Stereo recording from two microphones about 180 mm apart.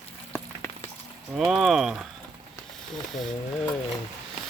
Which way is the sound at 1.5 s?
Centre (ahead or behind).